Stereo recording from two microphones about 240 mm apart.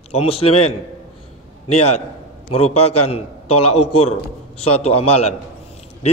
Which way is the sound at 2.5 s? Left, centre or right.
Left.